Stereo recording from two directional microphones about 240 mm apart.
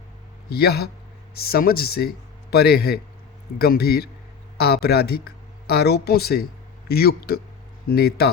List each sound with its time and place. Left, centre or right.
0.5 s speech: left